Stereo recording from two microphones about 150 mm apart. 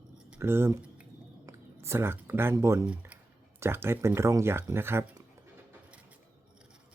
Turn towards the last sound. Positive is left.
turn(degrees=-15)  # may be behind; listen again after turning